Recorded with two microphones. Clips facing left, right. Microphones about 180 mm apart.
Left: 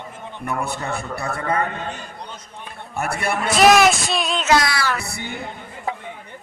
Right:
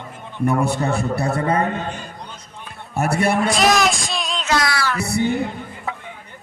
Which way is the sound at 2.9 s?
35° right (ahead or behind).